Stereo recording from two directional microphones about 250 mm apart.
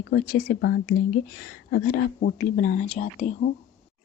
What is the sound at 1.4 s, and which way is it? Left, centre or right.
Speech, left.